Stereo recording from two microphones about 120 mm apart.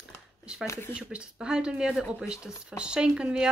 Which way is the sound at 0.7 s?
20° left (ahead or behind).